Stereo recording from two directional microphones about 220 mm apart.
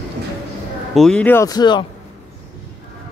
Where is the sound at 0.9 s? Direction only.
5° left (ahead or behind); by 1.9 s 20° left (ahead or behind).